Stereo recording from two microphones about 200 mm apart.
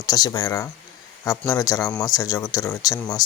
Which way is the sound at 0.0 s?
20° left (ahead or behind).